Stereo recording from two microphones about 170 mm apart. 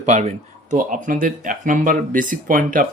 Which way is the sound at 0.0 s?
45° right (ahead or behind).